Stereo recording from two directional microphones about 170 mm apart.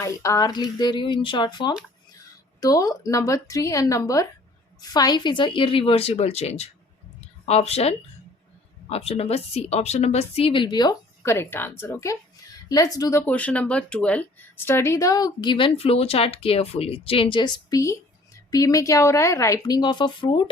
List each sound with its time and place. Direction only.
0.0 s a woman's voice: 20° left (ahead or behind)
11.2 s a woman's voice: 15° left (ahead or behind)
13.2 s speech: 10° left (ahead or behind); by 20.5 s 30° left (ahead or behind)